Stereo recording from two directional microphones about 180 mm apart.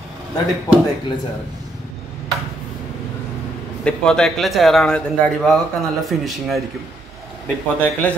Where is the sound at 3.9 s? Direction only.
5° left (ahead or behind).